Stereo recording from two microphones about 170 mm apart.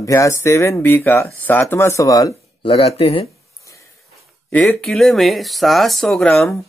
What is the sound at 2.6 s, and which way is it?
Speech, 35° left (ahead or behind).